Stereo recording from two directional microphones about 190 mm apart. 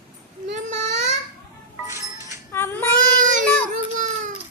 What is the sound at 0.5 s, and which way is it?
Baby cry, 40° right (ahead or behind).